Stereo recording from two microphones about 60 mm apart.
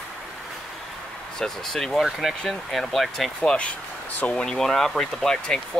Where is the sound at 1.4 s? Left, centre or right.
Centre.